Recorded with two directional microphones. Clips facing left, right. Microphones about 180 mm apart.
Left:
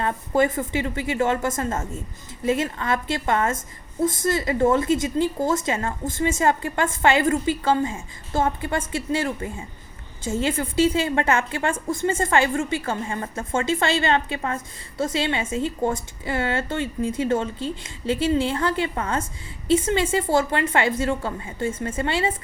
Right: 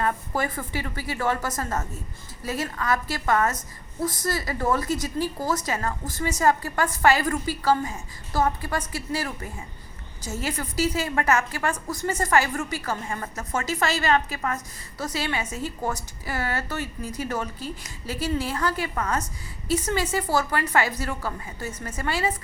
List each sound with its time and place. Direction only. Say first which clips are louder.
0.0 s a woman's voice: left 5 dB; 25° left (ahead or behind)